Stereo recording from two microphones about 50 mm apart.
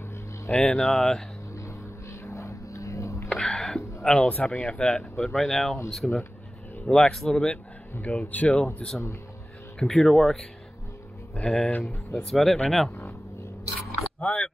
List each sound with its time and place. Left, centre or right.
0.5 s speech: centre
0.7 s speech: centre
1.5 s a sound: left
3.3 s music: centre
4.0 s speech: centre
6.9 s speech: centre
8.0 s speech: left
9.8 s speech: centre
11.4 s speech: centre
12.9 s vehicle: left
14.2 s speech: centre